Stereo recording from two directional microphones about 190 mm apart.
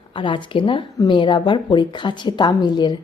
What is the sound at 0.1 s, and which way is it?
A woman's voice, 25° left (ahead or behind).